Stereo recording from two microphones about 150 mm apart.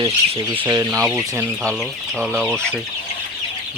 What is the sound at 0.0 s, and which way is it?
Speech, 35° right (ahead or behind).